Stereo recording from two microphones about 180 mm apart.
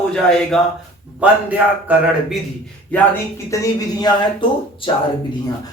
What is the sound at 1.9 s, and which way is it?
Speech, 10° right (ahead or behind).